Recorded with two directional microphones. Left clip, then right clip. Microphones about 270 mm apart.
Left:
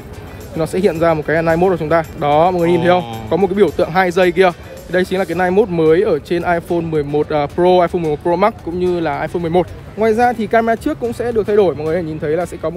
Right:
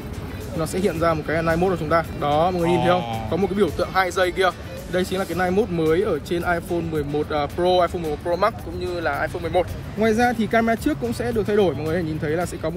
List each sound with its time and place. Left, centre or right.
0.6 s speech: left